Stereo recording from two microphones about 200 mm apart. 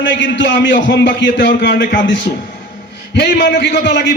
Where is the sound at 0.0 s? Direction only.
65° left (ahead or behind).